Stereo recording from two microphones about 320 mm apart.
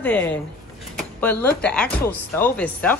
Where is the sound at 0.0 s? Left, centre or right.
Centre.